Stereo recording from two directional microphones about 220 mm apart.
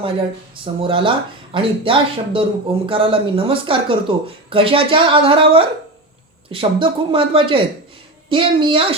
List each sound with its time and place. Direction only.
0.6 s a man's voice: 25° right (ahead or behind)